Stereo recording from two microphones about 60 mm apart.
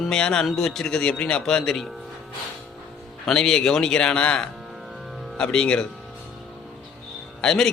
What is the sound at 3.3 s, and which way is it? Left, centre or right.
A man's voice, centre.